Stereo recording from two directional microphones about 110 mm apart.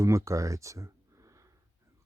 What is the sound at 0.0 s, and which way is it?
Speech, 25° right (ahead or behind).